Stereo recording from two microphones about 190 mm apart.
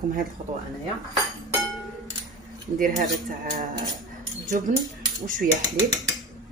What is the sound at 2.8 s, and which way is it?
Speech, 45° right (ahead or behind).